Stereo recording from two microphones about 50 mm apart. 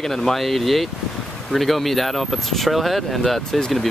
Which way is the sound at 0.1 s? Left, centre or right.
Centre.